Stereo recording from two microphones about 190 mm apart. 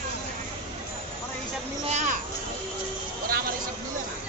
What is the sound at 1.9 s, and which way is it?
Children playing, 40° right (ahead or behind).